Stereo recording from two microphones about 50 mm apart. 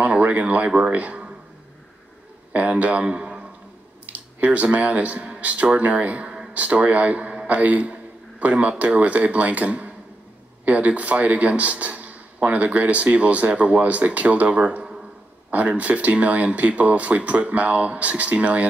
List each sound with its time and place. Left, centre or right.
0.0 s a sound: right
0.7 s speech: right
2.5 s speech: right
4.1 s a man's voice: right